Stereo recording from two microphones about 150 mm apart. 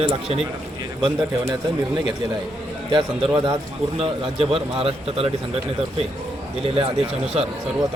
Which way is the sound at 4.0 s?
40° right (ahead or behind).